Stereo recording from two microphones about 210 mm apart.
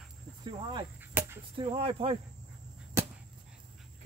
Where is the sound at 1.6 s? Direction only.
25° right (ahead or behind).